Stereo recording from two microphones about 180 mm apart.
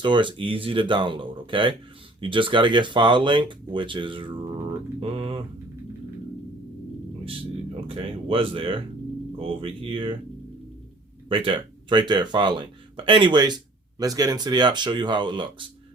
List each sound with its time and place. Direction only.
0.0 s speech: 25° right (ahead or behind)
4.9 s mantra: 30° right (ahead or behind)
7.3 s speech: 30° right (ahead or behind)
11.3 s speech: 30° right (ahead or behind)